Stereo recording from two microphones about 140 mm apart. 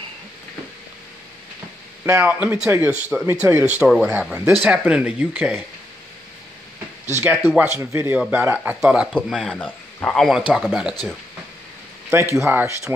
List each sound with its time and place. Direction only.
2.1 s speech: 10° right (ahead or behind)
7.2 s speech: 15° right (ahead or behind)
12.1 s speech: 20° right (ahead or behind)